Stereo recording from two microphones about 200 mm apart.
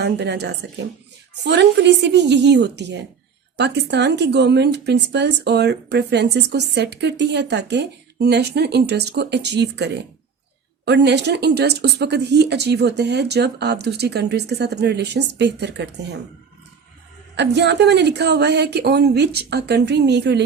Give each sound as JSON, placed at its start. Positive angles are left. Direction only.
{"t": 0.0, "sound": "speech", "side_deg": -55}
{"t": 17.3, "sound": "speech", "side_deg": -60}